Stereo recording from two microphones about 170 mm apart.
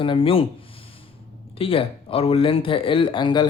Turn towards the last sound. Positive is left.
turn(degrees=25)  # may be behind; listen again after turning